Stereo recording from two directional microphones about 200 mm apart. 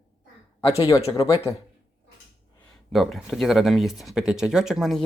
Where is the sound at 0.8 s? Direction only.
20° left (ahead or behind).